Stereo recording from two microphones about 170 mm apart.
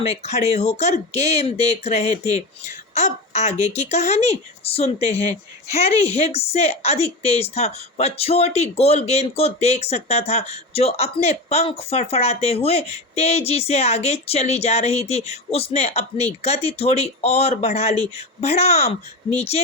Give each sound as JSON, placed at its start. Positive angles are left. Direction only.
{"t": 0.0, "sound": "speech", "side_deg": 40}